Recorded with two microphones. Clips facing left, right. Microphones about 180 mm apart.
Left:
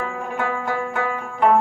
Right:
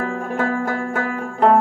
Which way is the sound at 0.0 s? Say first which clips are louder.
Right 3 dB; 40° right (ahead or behind).